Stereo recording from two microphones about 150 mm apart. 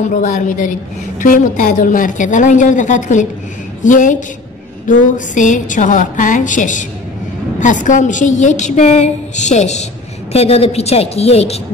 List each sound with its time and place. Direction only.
0.0 s a woman's voice: 55° left (ahead or behind)